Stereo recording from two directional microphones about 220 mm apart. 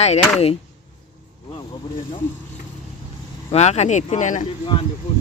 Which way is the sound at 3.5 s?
30° left (ahead or behind).